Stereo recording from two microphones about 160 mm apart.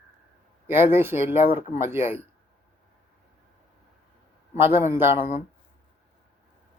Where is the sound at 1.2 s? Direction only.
40° left (ahead or behind).